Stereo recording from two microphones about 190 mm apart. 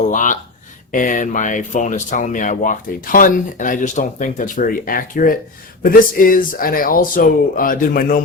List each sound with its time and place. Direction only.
0.1 s speech: 40° left (ahead or behind)